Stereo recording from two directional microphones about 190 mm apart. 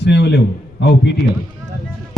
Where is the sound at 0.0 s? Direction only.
60° left (ahead or behind).